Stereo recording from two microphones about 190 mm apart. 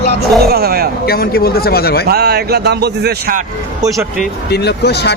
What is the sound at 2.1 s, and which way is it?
Speech, 55° right (ahead or behind).